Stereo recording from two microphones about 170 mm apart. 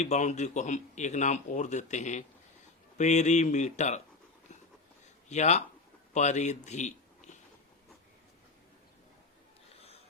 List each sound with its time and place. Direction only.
0.0 s speech: 45° left (ahead or behind)
5.3 s a man's voice: 40° left (ahead or behind)